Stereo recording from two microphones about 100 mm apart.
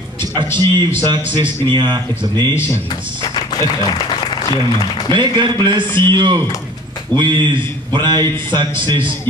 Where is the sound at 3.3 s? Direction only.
45° left (ahead or behind).